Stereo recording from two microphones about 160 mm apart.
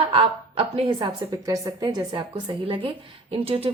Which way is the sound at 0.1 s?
35° right (ahead or behind).